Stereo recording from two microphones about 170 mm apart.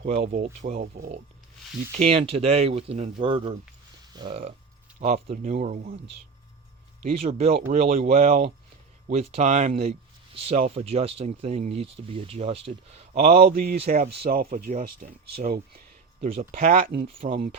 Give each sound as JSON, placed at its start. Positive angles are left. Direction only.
{"t": 0.2, "sound": "speech", "side_deg": -40}
{"t": 4.1, "sound": "a sound", "side_deg": -25}
{"t": 5.0, "sound": "speech", "side_deg": -35}
{"t": 7.1, "sound": "speech", "side_deg": -40}
{"t": 9.0, "sound": "speech", "side_deg": -40}
{"t": 13.4, "sound": "speech", "side_deg": -60}
{"t": 13.7, "sound": "speech", "side_deg": -40}
{"t": 14.2, "sound": "speech", "side_deg": -60}
{"t": 16.2, "sound": "speech", "side_deg": -35}
{"t": 16.6, "sound": "speech", "side_deg": -55}
{"t": 17.2, "sound": "speech", "side_deg": -30}